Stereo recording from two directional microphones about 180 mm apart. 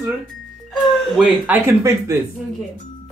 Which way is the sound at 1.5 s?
15° right (ahead or behind).